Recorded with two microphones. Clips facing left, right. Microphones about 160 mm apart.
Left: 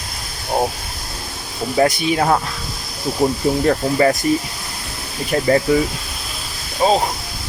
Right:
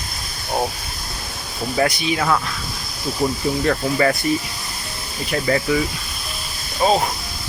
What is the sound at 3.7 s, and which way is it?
Speech, 25° left (ahead or behind).